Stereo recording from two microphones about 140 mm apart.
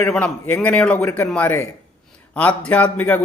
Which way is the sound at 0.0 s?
10° left (ahead or behind).